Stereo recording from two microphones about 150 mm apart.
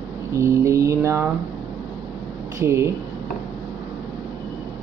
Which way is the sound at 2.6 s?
15° right (ahead or behind).